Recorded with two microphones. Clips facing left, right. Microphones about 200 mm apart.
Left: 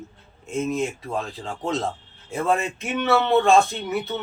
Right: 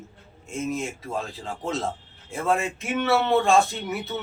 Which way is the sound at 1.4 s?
Centre (ahead or behind).